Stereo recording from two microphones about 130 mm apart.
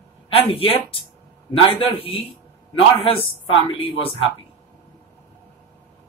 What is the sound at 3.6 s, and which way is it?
Speech, 45° left (ahead or behind).